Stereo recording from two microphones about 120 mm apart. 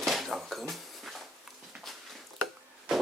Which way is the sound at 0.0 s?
Centre (ahead or behind).